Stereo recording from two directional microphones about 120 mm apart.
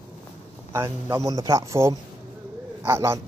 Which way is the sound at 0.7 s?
25° right (ahead or behind).